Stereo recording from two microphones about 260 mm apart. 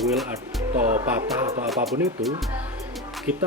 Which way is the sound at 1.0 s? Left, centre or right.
Centre.